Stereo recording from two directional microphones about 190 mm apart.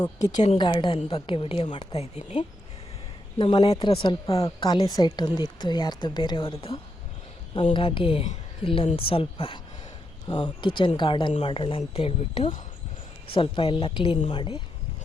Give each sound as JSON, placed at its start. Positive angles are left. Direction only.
{"t": 0.0, "sound": "a woman's voice", "side_deg": 20}